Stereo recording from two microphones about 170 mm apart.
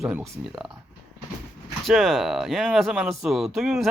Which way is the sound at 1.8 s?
Centre (ahead or behind).